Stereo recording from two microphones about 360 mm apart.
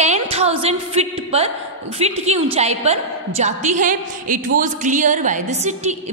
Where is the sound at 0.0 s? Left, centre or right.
Centre.